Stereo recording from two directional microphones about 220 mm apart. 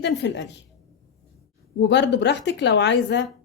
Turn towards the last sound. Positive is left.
turn(degrees=50)  # may be behind; listen again after turning